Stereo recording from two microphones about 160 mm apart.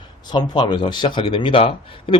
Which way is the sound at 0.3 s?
25° left (ahead or behind).